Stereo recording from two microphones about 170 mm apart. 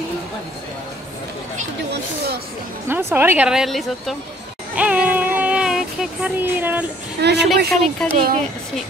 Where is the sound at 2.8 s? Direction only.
10° right (ahead or behind).